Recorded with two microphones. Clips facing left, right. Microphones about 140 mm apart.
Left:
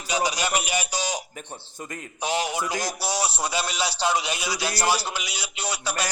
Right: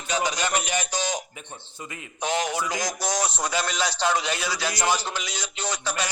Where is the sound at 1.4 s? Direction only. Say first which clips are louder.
Left 2 dB; 45° left (ahead or behind).